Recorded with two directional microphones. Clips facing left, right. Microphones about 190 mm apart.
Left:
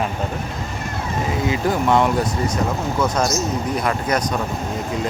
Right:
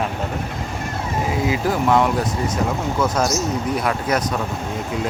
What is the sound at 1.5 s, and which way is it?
Speech, centre (ahead or behind).